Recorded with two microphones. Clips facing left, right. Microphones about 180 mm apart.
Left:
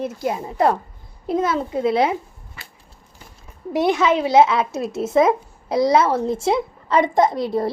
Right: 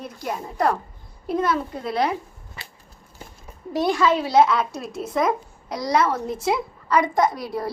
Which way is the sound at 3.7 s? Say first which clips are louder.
Left 2 dB; 20° left (ahead or behind).